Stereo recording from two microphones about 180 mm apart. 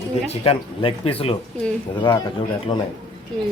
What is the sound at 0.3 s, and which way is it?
A man's voice, 30° left (ahead or behind).